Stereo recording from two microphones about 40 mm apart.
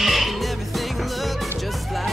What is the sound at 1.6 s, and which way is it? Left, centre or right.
Music, centre.